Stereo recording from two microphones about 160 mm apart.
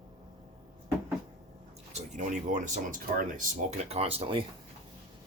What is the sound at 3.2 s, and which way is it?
Speech, 55° right (ahead or behind).